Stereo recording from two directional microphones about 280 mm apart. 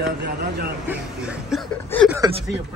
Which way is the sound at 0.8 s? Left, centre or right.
Centre.